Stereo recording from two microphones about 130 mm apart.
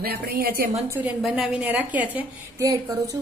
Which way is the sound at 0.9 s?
10° right (ahead or behind).